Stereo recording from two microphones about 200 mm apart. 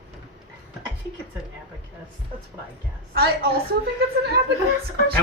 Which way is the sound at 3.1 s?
50° right (ahead or behind).